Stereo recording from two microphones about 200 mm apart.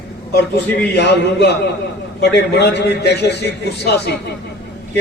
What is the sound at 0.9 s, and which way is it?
A man's voice, 60° left (ahead or behind).